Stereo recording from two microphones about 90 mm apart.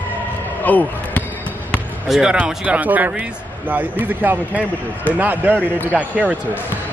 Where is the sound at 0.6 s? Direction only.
20° left (ahead or behind).